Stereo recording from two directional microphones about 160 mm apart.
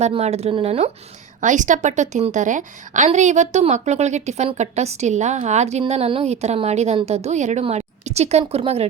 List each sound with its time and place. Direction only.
0.0 s a woman's voice: 40° right (ahead or behind)
1.4 s a woman's voice: 50° right (ahead or behind)